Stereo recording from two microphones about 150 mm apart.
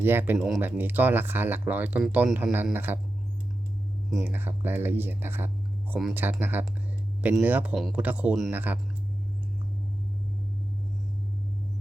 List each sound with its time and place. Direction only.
0.0 s speech: 15° right (ahead or behind)
4.2 s speech: 15° right (ahead or behind)